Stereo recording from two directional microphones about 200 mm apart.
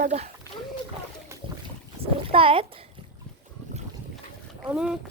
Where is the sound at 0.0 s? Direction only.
35° right (ahead or behind).